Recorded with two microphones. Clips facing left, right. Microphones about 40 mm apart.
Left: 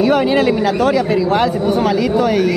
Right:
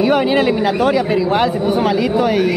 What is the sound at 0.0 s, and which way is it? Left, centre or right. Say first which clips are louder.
Speech: left 1 dB; centre.